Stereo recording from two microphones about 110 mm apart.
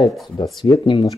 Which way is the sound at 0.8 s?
50° left (ahead or behind).